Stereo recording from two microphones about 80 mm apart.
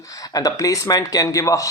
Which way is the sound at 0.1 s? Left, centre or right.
Left.